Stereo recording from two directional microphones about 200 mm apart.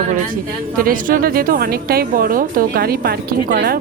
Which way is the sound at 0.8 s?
45° right (ahead or behind).